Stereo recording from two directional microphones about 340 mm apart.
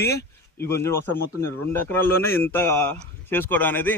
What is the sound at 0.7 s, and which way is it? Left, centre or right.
A man's voice, centre.